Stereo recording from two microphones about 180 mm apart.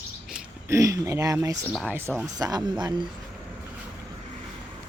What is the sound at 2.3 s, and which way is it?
Speech, 20° right (ahead or behind).